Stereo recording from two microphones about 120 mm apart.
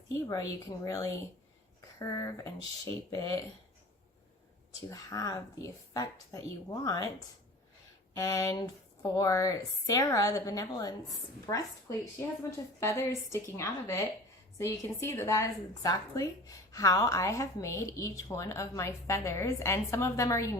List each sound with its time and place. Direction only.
0.1 s a woman's voice: 25° left (ahead or behind)
4.9 s a woman's voice: 30° left (ahead or behind)
8.1 s a woman's voice: 30° left (ahead or behind)